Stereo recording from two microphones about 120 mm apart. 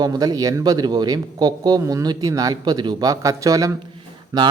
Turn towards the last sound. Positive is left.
turn(degrees=-35)  # may be behind; listen again after turning